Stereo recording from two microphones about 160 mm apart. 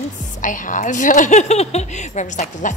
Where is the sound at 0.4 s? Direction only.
55° left (ahead or behind).